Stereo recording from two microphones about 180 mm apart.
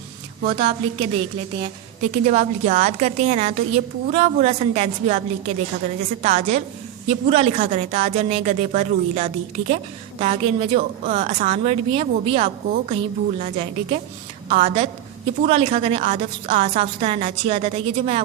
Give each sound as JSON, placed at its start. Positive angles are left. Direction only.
{"t": 0.4, "sound": "a woman's voice", "side_deg": -35}